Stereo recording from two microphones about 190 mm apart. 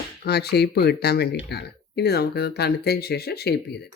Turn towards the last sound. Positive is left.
turn(degrees=60)  # may be behind; listen again after turning